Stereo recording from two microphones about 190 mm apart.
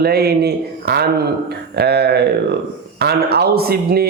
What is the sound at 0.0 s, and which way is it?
Speech, 55° right (ahead or behind).